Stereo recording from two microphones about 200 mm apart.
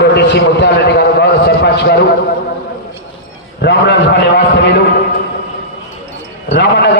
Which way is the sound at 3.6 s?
60° left (ahead or behind).